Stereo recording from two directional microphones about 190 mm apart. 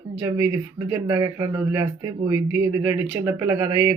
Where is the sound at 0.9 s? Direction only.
20° right (ahead or behind).